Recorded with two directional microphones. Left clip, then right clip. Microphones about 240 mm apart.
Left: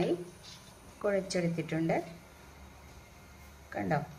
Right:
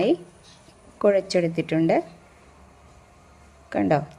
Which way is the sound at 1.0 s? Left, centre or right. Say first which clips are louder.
Right 12 dB; right.